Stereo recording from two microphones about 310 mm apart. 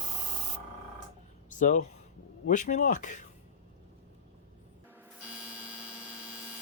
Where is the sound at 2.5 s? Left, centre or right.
Left.